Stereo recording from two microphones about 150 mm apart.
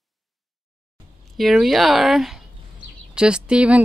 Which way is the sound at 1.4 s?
Centre (ahead or behind).